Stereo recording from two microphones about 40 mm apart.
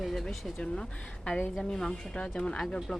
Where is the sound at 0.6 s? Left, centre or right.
Left.